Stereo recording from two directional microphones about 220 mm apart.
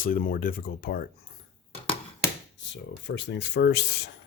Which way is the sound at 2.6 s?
55° left (ahead or behind).